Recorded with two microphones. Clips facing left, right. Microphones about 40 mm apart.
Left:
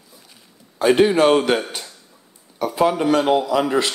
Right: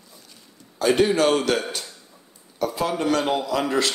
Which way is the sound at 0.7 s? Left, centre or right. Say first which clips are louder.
Left 4 dB; left.